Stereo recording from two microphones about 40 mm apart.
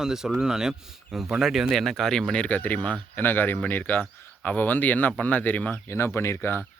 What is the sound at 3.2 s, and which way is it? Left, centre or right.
Speech, left.